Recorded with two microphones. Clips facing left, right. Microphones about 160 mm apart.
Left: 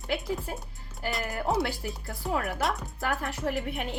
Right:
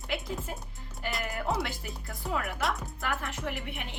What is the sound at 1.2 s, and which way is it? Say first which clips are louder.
Speech: left 4 dB; 40° left (ahead or behind).